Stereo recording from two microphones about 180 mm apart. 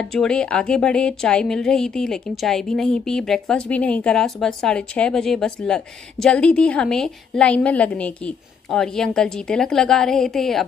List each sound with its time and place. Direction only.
0.0 s a woman's voice: 5° left (ahead or behind)